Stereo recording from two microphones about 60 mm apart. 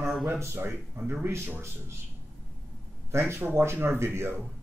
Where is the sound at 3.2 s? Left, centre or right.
Right.